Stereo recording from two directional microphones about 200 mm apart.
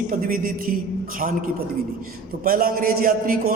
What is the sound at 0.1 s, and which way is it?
Speech, 45° right (ahead or behind).